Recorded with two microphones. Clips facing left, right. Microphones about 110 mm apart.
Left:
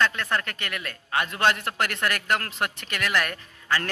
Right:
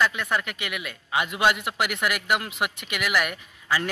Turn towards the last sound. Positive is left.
turn(degrees=-10)  # may be behind; listen again after turning